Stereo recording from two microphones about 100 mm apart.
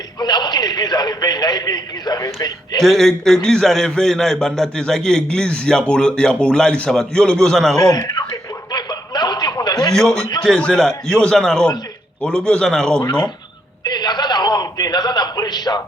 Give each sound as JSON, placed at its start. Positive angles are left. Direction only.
{"t": 0.2, "sound": "a man's voice", "side_deg": 45}
{"t": 2.8, "sound": "a man's voice", "side_deg": 5}
{"t": 7.8, "sound": "speech", "side_deg": 35}
{"t": 8.7, "sound": "snicker", "side_deg": 45}
{"t": 9.9, "sound": "a man's voice", "side_deg": 5}
{"t": 13.8, "sound": "a sound", "side_deg": 45}